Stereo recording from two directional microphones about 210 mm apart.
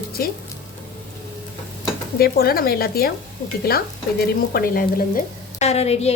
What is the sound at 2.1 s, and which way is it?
Speech, 45° left (ahead or behind).